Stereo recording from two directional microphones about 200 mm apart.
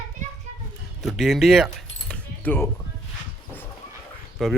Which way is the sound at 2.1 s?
10° left (ahead or behind).